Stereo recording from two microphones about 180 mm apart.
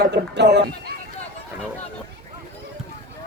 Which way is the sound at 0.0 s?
70° right (ahead or behind).